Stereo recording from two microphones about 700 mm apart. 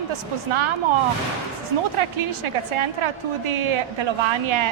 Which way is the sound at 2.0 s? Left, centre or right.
Right.